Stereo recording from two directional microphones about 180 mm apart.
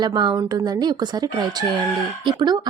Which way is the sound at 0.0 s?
25° right (ahead or behind).